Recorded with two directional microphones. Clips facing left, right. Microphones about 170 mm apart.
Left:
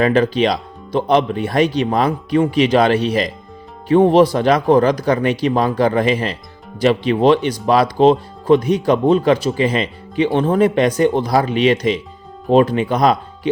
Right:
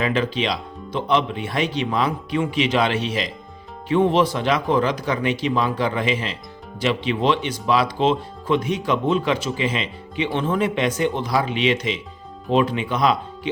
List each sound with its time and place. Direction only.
0.0 s speech: 45° left (ahead or behind)